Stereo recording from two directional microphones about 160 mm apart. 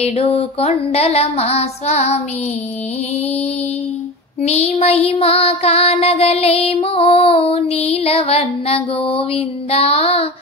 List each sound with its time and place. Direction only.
0.0 s child singing: 40° left (ahead or behind)
3.2 s child singing: 40° left (ahead or behind)